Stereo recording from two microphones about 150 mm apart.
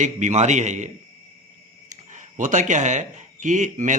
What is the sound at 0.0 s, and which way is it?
Speech, 50° right (ahead or behind).